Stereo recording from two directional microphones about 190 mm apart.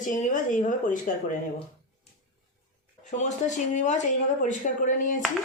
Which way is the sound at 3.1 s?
40° left (ahead or behind).